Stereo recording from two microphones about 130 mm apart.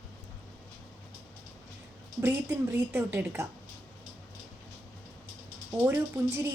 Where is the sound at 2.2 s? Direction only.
15° right (ahead or behind).